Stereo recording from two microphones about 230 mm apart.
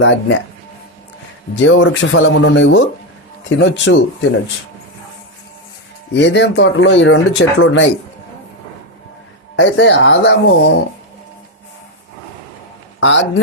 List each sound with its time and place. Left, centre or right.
0.0 s speech: left
1.5 s speech: left
6.1 s speech: left
9.6 s speech: left
13.0 s speech: left